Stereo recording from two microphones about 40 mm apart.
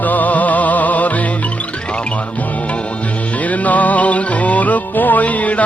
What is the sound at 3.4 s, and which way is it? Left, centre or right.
Music, left.